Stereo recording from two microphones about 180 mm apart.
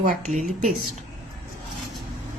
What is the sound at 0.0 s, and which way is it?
Speech, 45° right (ahead or behind).